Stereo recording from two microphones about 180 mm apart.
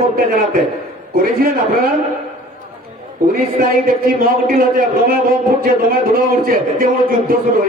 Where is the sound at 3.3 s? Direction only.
55° right (ahead or behind).